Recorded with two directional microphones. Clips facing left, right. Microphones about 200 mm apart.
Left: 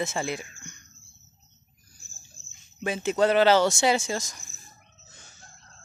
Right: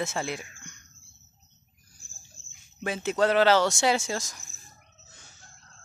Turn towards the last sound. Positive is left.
turn(degrees=0)  # may be behind; listen again after turning